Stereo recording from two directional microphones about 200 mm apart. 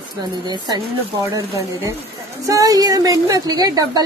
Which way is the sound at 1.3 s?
15° right (ahead or behind).